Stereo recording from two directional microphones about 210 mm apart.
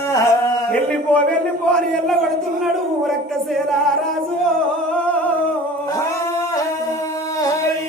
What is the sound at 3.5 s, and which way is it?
Music, centre (ahead or behind).